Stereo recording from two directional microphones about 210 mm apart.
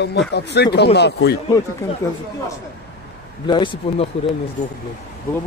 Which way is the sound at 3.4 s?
20° left (ahead or behind).